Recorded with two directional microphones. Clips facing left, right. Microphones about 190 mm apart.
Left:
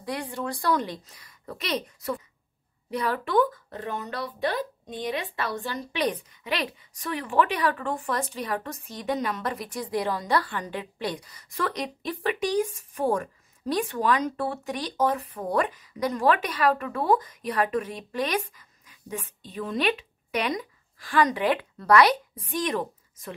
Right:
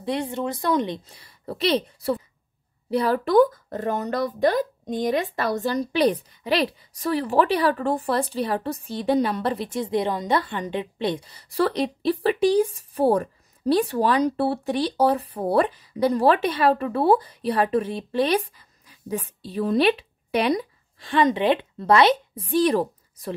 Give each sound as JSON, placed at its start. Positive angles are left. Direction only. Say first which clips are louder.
{"t": 0.0, "sound": "a woman's voice", "louder": "right 6 dB", "side_deg": -25}